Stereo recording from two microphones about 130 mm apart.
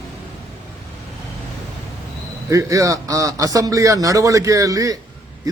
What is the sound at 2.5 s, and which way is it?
A man's voice, 25° right (ahead or behind).